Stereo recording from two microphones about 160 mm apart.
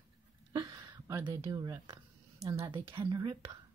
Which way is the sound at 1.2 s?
25° right (ahead or behind).